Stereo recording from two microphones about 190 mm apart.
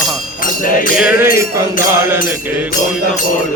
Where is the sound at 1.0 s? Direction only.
10° right (ahead or behind).